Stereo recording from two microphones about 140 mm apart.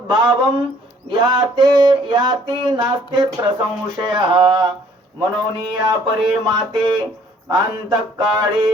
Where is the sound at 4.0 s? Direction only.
35° right (ahead or behind).